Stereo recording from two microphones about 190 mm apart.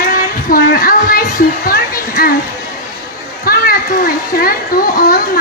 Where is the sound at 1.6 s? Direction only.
50° left (ahead or behind).